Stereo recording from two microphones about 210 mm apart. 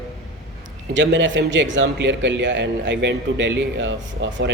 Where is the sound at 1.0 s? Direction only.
60° right (ahead or behind).